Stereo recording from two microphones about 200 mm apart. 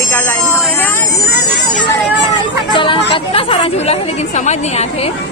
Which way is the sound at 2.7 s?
25° left (ahead or behind).